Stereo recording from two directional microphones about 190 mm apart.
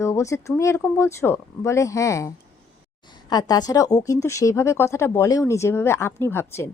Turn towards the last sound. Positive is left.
turn(degrees=15)  # may be behind; listen again after turning